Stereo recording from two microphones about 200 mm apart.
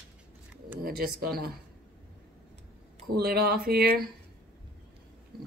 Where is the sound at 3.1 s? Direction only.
50° right (ahead or behind).